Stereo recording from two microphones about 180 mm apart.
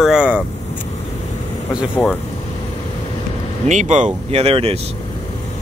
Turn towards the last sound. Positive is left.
turn(degrees=-35)  # may be behind; listen again after turning